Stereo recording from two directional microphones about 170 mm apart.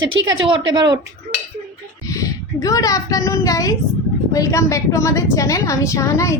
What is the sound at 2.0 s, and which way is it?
A woman's voice, 20° left (ahead or behind).